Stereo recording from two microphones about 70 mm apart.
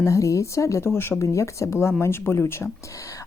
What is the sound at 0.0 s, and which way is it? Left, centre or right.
Speech, left.